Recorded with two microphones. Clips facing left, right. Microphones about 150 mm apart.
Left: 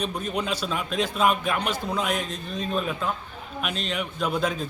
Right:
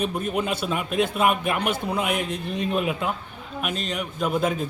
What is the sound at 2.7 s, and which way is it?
Speech, 15° right (ahead or behind).